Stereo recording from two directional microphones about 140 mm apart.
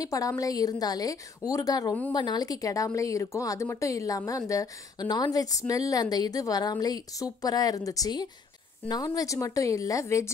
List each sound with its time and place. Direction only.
0.0 s a woman's voice: 25° left (ahead or behind)